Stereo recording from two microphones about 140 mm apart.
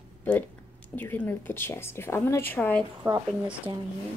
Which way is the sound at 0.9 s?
15° left (ahead or behind).